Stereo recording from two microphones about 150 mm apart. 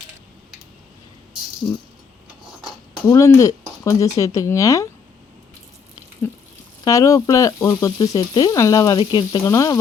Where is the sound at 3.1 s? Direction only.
20° left (ahead or behind).